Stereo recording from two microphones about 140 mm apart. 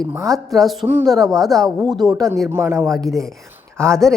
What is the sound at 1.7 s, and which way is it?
Speech, 30° right (ahead or behind).